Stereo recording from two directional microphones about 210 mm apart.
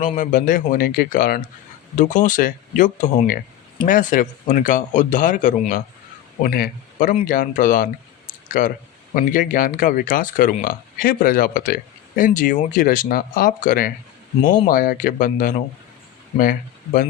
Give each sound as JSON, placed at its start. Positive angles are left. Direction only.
{"t": 0.2, "sound": "speech", "side_deg": 40}